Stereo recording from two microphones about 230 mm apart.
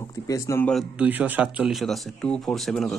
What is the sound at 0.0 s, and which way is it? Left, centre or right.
Speech, centre.